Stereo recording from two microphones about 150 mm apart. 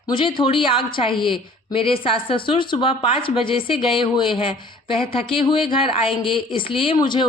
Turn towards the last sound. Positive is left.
turn(degrees=30)  # may be behind; listen again after turning